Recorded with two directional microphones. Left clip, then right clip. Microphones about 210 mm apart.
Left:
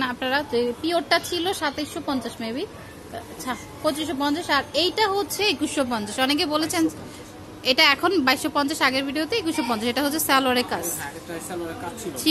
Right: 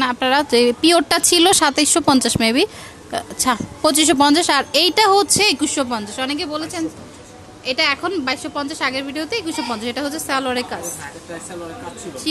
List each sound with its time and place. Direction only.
0.0 s speech: 25° right (ahead or behind)
5.8 s a woman's voice: 10° right (ahead or behind)
6.1 s a woman's voice: 5° left (ahead or behind)